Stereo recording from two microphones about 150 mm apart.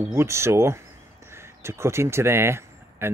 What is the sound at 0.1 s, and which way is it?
Speech, 15° right (ahead or behind).